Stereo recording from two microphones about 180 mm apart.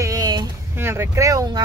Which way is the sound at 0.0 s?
20° right (ahead or behind).